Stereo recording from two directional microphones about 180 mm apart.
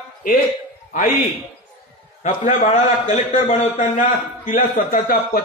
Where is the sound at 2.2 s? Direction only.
40° left (ahead or behind).